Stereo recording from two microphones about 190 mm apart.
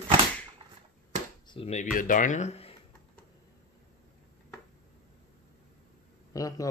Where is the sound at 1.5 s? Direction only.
35° left (ahead or behind).